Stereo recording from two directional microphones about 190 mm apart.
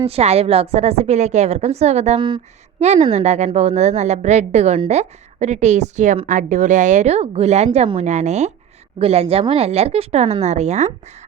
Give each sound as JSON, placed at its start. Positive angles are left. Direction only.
{"t": 0.0, "sound": "a woman's voice", "side_deg": -35}